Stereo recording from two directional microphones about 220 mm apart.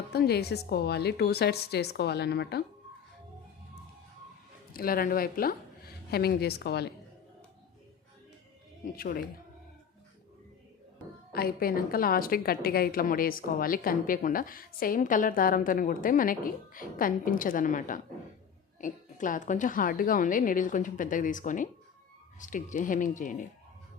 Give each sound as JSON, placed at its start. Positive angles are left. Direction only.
{"t": 0.1, "sound": "a woman's voice", "side_deg": 45}
{"t": 4.7, "sound": "a woman's voice", "side_deg": 40}
{"t": 8.8, "sound": "a woman's voice", "side_deg": 40}
{"t": 11.3, "sound": "a woman's voice", "side_deg": 45}